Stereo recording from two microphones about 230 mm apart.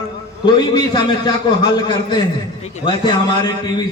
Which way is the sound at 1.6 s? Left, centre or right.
Centre.